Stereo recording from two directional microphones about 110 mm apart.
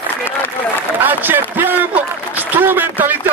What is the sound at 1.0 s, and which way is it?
A man's voice, 15° right (ahead or behind).